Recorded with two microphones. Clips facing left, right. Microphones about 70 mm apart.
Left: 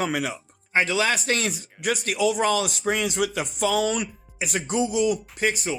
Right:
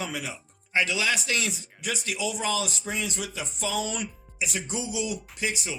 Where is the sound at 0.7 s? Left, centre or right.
Left.